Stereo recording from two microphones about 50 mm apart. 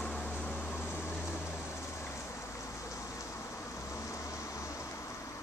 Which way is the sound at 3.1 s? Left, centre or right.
Left.